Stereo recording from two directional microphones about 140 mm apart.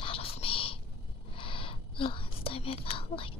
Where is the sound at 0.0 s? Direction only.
40° left (ahead or behind).